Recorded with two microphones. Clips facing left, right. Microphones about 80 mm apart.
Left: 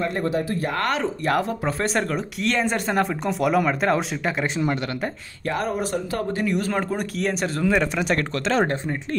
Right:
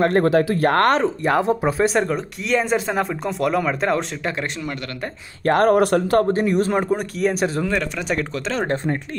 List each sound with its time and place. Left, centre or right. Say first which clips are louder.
0.0 s speech: right 8 dB; right
1.2 s speech: right 4 dB; right; by 4.5 s centre
5.5 s speech: right 10 dB; right
6.3 s speech: right 5 dB; right
6.7 s speech: right 5 dB; centre
7.0 s speech: right 4 dB; centre
7.7 s speech: left 2 dB; centre
8.1 s speech: right 1 dB; centre